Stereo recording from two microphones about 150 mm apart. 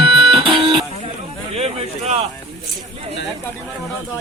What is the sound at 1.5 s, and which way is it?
Speech, 45° right (ahead or behind).